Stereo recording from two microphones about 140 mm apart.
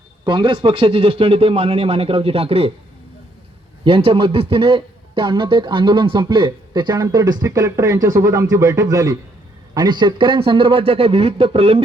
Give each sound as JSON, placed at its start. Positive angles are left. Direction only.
{"t": 0.3, "sound": "speech", "side_deg": -35}
{"t": 3.8, "sound": "a man's voice", "side_deg": -40}